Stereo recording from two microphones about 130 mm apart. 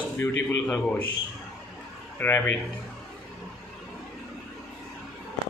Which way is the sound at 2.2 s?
15° left (ahead or behind).